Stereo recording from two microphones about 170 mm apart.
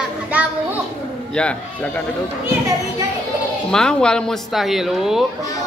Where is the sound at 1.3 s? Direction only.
5° left (ahead or behind).